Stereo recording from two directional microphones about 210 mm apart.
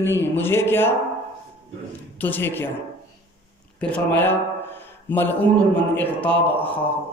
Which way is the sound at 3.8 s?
5° left (ahead or behind).